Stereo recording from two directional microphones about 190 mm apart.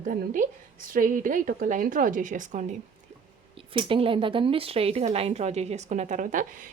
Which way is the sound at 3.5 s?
30° right (ahead or behind).